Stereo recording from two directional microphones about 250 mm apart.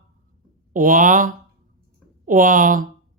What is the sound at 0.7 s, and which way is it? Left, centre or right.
Speech, right.